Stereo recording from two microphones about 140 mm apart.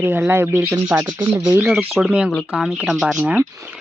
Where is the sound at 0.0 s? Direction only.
15° right (ahead or behind).